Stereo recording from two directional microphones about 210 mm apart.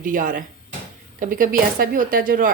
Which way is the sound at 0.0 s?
40° right (ahead or behind).